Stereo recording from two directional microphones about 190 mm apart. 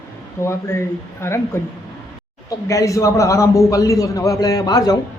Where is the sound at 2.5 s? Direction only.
15° left (ahead or behind).